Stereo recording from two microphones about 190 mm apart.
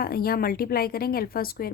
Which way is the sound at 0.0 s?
55° left (ahead or behind).